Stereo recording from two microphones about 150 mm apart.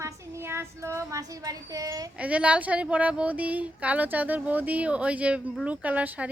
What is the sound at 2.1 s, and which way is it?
A woman's voice, 10° right (ahead or behind).